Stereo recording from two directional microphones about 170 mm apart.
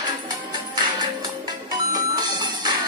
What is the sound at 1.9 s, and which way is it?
Music, 25° right (ahead or behind).